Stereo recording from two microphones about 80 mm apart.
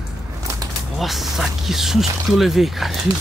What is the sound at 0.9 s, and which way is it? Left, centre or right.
Speech, centre.